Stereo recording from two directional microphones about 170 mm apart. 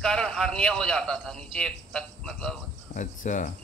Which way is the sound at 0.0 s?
5° left (ahead or behind).